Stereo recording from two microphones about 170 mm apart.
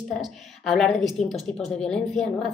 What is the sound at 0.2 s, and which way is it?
A woman's voice, centre (ahead or behind).